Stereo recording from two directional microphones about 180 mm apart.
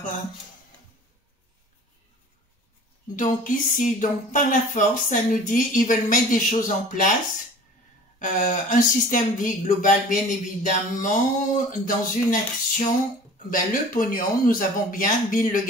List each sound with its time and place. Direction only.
3.2 s speech: 45° left (ahead or behind)
8.2 s speech: 45° left (ahead or behind)